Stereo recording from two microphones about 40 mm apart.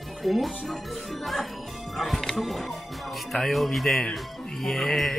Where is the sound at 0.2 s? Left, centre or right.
Centre.